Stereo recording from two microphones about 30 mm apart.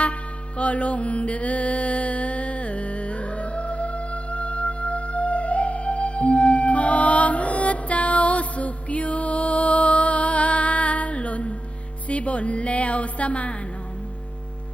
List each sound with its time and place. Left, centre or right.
0.0 s music: left